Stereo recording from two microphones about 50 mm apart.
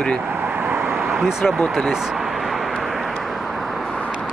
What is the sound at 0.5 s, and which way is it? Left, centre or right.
Vehicle, right.